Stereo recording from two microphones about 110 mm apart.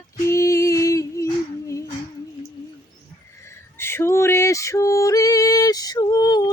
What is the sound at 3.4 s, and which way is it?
Female singing, 20° left (ahead or behind).